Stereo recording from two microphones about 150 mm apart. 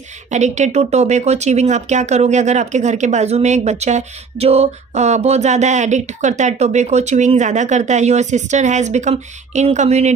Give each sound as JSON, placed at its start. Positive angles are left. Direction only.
{"t": 0.3, "sound": "speech", "side_deg": -50}